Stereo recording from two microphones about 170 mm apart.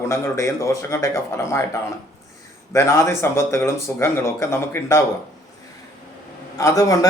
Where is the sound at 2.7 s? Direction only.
15° left (ahead or behind).